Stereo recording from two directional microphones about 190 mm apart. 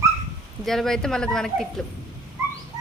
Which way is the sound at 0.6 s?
Centre (ahead or behind).